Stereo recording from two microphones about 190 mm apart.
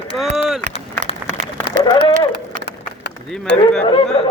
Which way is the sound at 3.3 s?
5° left (ahead or behind).